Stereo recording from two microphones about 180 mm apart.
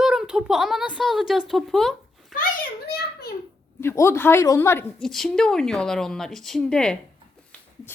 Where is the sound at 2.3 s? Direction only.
50° left (ahead or behind).